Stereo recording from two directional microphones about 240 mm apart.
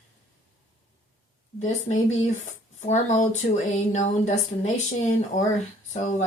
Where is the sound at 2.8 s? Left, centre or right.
Left.